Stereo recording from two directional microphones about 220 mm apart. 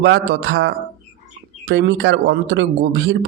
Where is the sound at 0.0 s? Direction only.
50° right (ahead or behind).